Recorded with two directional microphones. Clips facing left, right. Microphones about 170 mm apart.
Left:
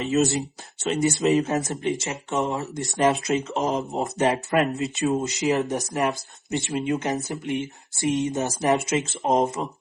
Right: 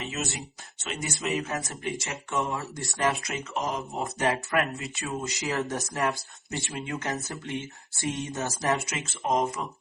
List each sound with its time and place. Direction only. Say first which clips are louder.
0.0 s speech: left 12 dB; 35° left (ahead or behind)